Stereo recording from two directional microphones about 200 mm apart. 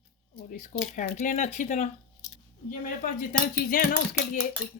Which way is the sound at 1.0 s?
40° left (ahead or behind).